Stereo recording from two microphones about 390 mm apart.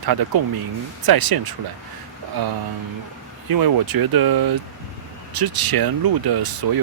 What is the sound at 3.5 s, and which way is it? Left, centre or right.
Speech, right.